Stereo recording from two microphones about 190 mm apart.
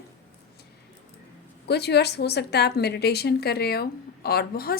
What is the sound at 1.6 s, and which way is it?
A woman's voice, 60° left (ahead or behind).